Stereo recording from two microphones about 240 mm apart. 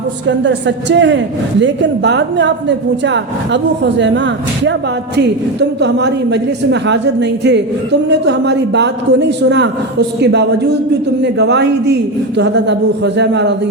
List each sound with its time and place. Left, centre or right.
0.3 s a woman's voice: right